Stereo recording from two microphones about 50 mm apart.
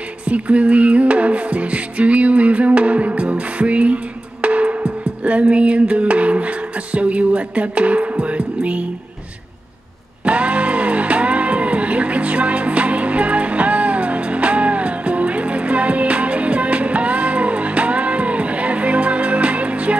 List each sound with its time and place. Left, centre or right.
0.3 s music: right
10.2 s music: right